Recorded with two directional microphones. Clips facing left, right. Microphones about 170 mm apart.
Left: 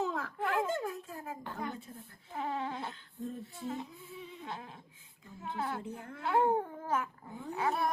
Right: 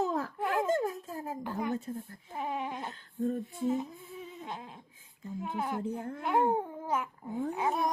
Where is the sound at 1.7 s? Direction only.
45° right (ahead or behind).